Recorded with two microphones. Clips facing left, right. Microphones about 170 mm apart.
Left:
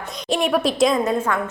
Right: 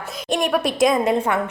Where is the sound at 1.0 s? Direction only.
15° right (ahead or behind).